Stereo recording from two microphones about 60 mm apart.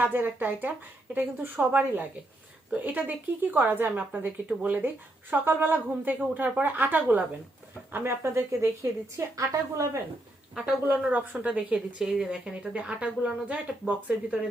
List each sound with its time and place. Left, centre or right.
0.0 s a woman's voice: right
7.9 s a woman's voice: right
10.8 s a woman's voice: right
12.0 s a woman's voice: centre